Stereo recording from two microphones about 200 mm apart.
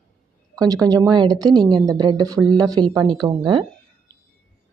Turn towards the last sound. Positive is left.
turn(degrees=-25)  # may be behind; listen again after turning